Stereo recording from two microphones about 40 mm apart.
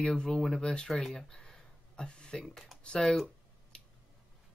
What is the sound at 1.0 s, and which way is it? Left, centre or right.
Speech, centre.